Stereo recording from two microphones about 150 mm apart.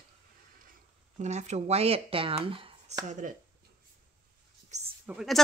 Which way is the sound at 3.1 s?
55° right (ahead or behind).